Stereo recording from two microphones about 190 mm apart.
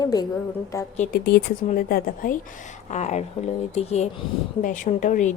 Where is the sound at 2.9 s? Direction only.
40° left (ahead or behind).